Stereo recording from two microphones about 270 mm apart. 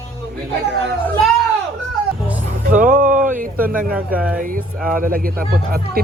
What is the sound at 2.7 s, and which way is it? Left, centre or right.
Speech, right.